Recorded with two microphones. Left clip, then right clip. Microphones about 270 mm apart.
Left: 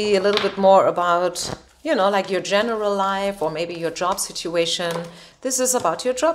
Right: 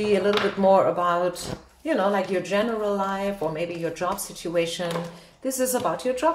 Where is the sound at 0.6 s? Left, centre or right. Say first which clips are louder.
Left 5 dB; left.